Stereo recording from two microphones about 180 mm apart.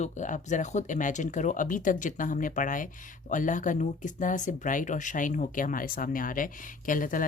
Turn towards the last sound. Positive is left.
turn(degrees=50)  # may be behind; listen again after turning